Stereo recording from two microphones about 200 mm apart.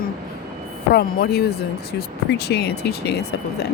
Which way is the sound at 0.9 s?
55° left (ahead or behind).